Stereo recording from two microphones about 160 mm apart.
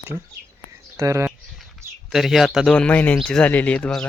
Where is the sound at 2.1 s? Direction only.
Centre (ahead or behind).